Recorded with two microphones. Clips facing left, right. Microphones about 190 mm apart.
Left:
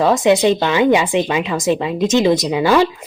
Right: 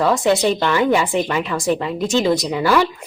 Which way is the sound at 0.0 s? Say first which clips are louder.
Left 3 dB; 20° left (ahead or behind).